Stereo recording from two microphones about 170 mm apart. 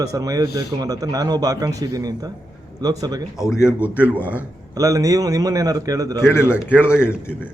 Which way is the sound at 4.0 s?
10° left (ahead or behind).